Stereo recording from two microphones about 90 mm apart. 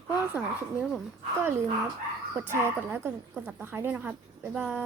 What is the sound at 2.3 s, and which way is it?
Speech, 25° right (ahead or behind).